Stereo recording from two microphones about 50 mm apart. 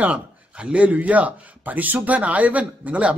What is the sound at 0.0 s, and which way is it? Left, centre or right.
A man's voice, right.